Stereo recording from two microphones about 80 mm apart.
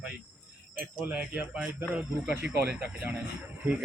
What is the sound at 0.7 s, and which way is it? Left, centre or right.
Speech, centre.